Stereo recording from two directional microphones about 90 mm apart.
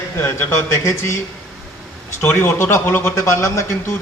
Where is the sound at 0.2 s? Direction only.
30° left (ahead or behind).